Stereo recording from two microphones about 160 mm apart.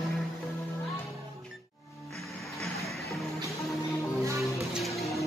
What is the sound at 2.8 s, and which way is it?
Music, centre (ahead or behind).